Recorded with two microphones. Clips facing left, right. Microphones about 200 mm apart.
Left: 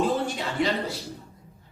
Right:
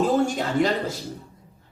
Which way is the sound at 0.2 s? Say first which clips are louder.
Right 6 dB; 45° right (ahead or behind).